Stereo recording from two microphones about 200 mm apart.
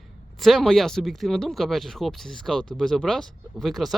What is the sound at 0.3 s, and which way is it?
Speech, centre (ahead or behind).